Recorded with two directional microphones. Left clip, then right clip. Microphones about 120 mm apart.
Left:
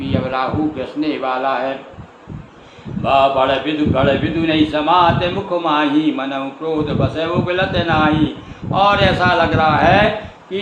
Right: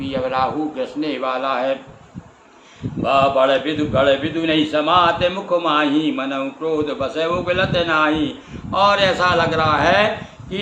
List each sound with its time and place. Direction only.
0.0 s a man's voice: 30° right (ahead or behind)
3.0 s a man's voice: 35° right (ahead or behind)